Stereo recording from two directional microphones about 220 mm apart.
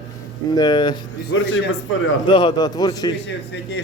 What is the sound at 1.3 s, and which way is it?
Speech, 60° left (ahead or behind).